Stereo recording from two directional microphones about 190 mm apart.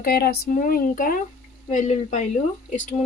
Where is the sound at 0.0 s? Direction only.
50° left (ahead or behind).